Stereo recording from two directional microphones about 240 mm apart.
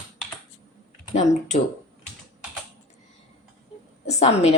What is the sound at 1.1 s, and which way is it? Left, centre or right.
Speech, left.